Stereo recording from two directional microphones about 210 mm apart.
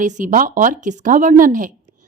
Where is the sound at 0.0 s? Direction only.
35° right (ahead or behind).